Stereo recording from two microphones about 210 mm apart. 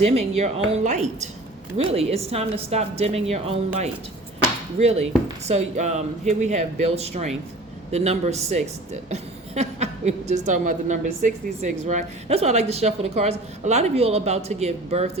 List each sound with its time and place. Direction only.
0.0 s a woman's voice: 30° right (ahead or behind)